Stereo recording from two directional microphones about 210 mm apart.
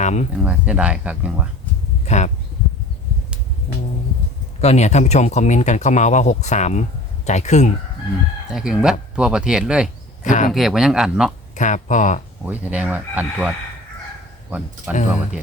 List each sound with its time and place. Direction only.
0.0 s speech: 35° left (ahead or behind)
0.3 s speech: 5° right (ahead or behind)
2.0 s speech: 35° left (ahead or behind)
4.6 s speech: 30° left (ahead or behind)
8.4 s speech: 5° right (ahead or behind)
10.2 s speech: 40° left (ahead or behind)
10.5 s speech: centre (ahead or behind)
11.5 s speech: 35° left (ahead or behind)
12.5 s speech: 5° right (ahead or behind)